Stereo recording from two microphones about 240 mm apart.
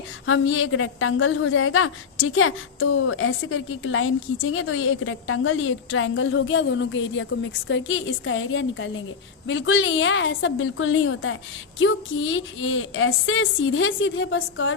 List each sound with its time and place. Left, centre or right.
0.3 s a woman's voice: left